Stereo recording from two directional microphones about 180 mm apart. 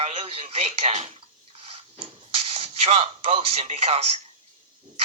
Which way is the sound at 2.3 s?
35° right (ahead or behind).